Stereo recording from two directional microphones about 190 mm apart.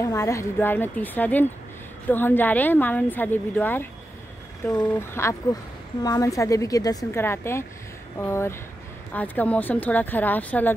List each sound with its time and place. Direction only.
0.0 s a woman's voice: 15° left (ahead or behind)